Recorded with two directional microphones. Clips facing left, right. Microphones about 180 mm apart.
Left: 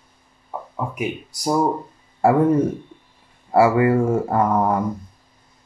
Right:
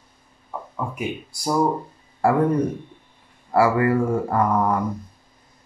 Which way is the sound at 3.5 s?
25° left (ahead or behind).